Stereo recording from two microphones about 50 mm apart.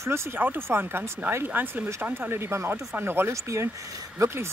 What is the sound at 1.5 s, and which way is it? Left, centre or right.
Speech, right.